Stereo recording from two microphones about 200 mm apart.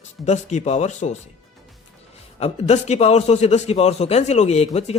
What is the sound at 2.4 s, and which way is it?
A man's voice, 30° left (ahead or behind).